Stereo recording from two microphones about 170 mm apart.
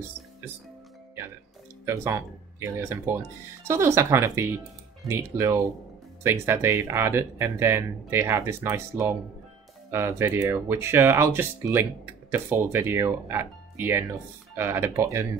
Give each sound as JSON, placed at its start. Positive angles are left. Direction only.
{"t": 1.9, "sound": "speech", "side_deg": -15}